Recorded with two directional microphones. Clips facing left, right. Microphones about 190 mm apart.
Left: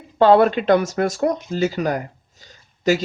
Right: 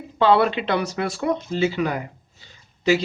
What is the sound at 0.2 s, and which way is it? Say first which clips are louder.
A man's voice: left 4 dB; 45° left (ahead or behind).